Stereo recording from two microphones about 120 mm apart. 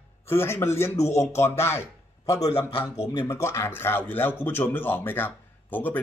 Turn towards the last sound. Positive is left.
turn(degrees=15)  # may be behind; listen again after turning